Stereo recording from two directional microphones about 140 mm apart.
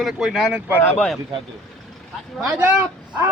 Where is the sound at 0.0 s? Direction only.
Centre (ahead or behind).